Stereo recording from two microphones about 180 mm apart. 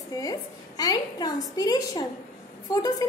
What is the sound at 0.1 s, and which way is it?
A woman's voice, 20° left (ahead or behind).